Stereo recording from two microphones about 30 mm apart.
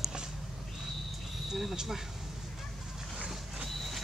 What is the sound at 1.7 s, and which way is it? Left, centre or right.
Speech, centre.